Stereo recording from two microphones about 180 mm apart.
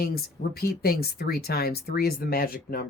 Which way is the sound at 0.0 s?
55° left (ahead or behind).